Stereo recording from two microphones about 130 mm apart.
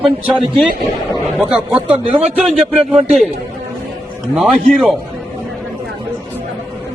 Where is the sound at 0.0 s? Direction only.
10° right (ahead or behind).